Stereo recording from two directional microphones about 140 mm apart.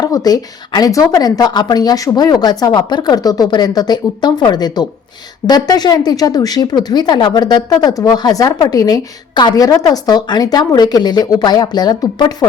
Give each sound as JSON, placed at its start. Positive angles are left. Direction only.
{"t": 0.0, "sound": "a woman's voice", "side_deg": 25}